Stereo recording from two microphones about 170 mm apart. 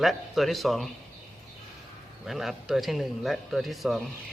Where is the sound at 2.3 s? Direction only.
Centre (ahead or behind).